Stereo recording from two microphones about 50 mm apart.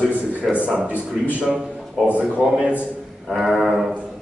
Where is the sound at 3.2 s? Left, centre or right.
Centre.